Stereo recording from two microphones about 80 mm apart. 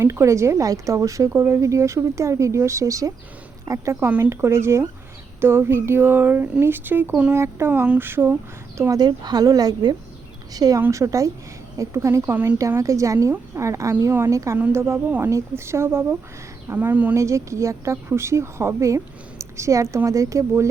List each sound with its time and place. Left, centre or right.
0.0 s speech: right
4.2 s speech: right
8.9 s speech: right
10.8 s speech: right
12.2 s speech: right
12.5 s speech: right
16.7 s speech: right
17.2 s speech: right